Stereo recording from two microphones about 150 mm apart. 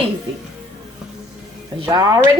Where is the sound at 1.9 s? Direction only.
25° right (ahead or behind).